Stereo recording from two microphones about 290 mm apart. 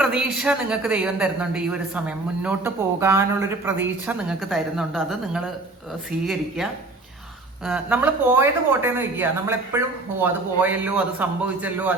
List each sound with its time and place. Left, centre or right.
0.0 s speech: centre
7.6 s speech: centre